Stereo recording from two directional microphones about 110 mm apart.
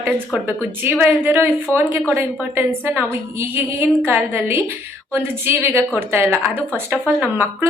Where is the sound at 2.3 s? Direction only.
15° right (ahead or behind).